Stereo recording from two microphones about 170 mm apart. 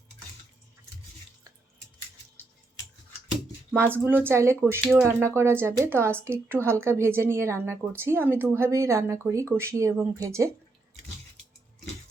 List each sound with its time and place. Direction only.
3.7 s speech: 15° right (ahead or behind)